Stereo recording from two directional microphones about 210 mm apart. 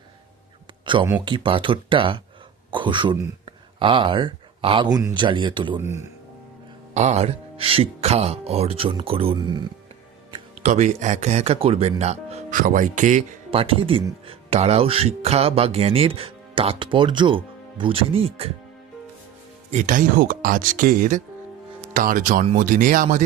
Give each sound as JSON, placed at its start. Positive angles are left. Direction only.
{"t": 0.9, "sound": "speech", "side_deg": -20}
{"t": 5.8, "sound": "speech", "side_deg": -10}
{"t": 6.9, "sound": "speech", "side_deg": -30}
{"t": 10.3, "sound": "speech", "side_deg": -35}
{"t": 19.7, "sound": "speech", "side_deg": -35}